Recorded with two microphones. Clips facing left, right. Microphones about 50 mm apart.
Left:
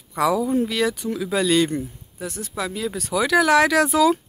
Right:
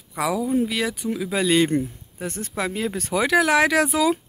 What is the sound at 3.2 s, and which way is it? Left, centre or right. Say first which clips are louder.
Speech: left 2 dB; centre.